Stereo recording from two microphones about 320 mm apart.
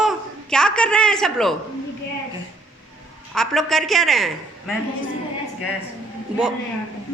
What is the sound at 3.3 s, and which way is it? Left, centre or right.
Speech, centre.